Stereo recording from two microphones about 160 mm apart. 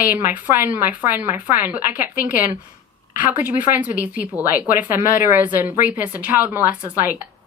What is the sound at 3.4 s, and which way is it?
A woman's voice, 10° right (ahead or behind).